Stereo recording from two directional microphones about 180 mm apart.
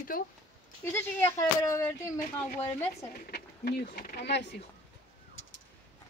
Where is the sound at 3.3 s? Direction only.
60° left (ahead or behind).